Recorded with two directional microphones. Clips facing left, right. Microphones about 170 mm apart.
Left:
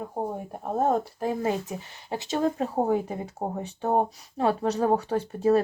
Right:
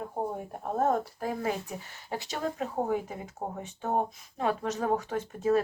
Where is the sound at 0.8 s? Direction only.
25° left (ahead or behind).